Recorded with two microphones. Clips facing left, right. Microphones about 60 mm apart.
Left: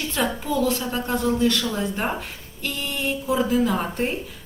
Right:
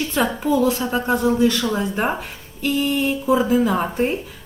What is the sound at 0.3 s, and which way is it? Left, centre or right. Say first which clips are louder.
A woman's voice: right 4 dB; centre.